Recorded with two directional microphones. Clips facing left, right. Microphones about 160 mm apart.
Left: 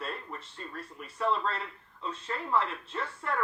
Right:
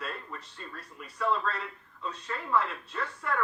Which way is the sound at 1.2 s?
25° left (ahead or behind).